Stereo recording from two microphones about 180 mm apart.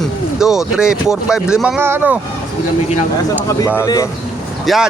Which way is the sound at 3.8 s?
20° left (ahead or behind).